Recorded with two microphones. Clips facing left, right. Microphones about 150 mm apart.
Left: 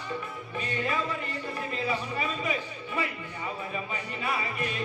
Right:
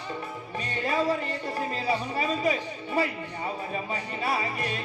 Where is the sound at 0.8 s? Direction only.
35° right (ahead or behind).